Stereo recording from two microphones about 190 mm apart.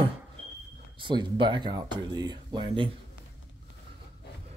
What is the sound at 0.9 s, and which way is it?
Speech, 25° right (ahead or behind).